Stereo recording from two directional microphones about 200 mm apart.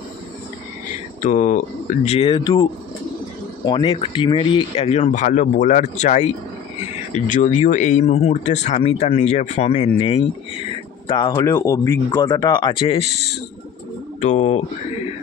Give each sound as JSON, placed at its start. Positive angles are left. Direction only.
{"t": 1.2, "sound": "speech", "side_deg": 35}